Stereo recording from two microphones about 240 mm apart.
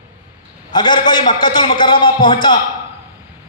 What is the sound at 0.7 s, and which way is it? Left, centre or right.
A man's voice, centre.